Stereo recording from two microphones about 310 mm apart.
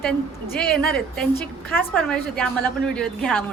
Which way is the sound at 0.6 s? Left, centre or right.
Left.